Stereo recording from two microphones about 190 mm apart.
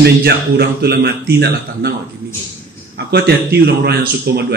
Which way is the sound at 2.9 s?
60° right (ahead or behind).